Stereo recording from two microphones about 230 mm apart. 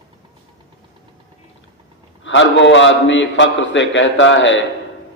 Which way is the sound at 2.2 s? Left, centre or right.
Left.